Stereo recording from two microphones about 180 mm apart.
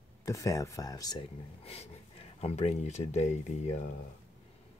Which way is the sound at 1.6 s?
35° left (ahead or behind).